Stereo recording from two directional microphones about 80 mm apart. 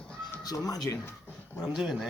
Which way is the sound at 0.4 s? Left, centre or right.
Left.